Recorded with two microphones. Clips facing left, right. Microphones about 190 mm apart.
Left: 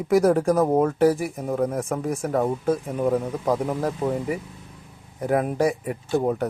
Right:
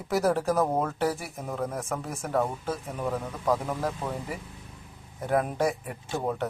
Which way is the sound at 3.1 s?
25° left (ahead or behind).